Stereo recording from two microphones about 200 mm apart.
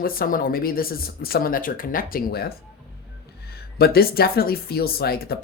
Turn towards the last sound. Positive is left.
turn(degrees=50)  # may be behind; listen again after turning